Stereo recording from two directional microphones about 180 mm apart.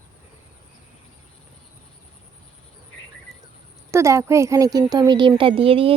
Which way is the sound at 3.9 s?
15° right (ahead or behind).